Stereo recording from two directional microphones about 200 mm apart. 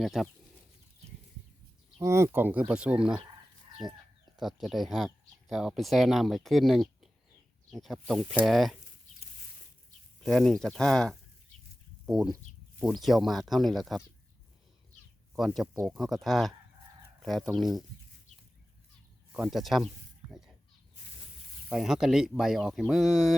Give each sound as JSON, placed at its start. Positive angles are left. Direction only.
{"t": 0.0, "sound": "speech", "side_deg": 0}
{"t": 2.0, "sound": "speech", "side_deg": -15}
{"t": 3.8, "sound": "speech", "side_deg": -20}
{"t": 4.4, "sound": "speech", "side_deg": 0}
{"t": 10.2, "sound": "speech", "side_deg": 5}
{"t": 15.4, "sound": "speech", "side_deg": 0}
{"t": 17.5, "sound": "speech", "side_deg": 0}
{"t": 19.3, "sound": "snake", "side_deg": 0}
{"t": 21.7, "sound": "speech", "side_deg": 0}